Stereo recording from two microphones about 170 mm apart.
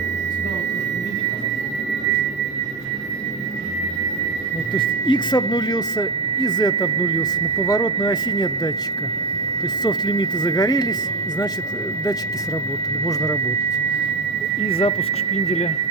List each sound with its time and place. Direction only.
4.8 s speech: 30° left (ahead or behind)
9.8 s speech: 25° left (ahead or behind)
14.7 s speech: 35° left (ahead or behind)